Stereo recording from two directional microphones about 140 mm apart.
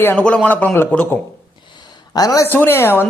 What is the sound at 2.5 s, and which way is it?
Speech, 15° left (ahead or behind).